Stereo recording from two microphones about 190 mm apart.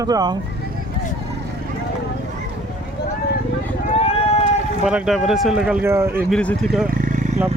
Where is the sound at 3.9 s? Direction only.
30° left (ahead or behind).